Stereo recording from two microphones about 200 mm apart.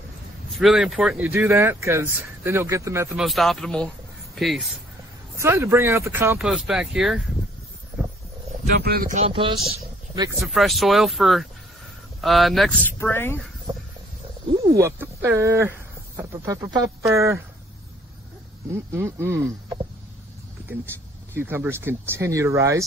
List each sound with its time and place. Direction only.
0.6 s speech: centre (ahead or behind)
3.2 s speech: centre (ahead or behind)
5.4 s speech: 10° right (ahead or behind)
8.8 s speech: 45° right (ahead or behind)
9.2 s speech: 25° right (ahead or behind)
9.8 s a sound: 20° right (ahead or behind)
10.4 s speech: centre (ahead or behind)
14.8 s speech: 10° right (ahead or behind)
18.9 s speech: 15° right (ahead or behind)